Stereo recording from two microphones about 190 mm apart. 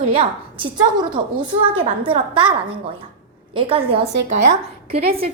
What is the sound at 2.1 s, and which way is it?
Speech, 25° right (ahead or behind).